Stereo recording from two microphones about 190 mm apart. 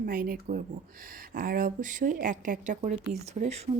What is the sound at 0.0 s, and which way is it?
Speech, 50° right (ahead or behind).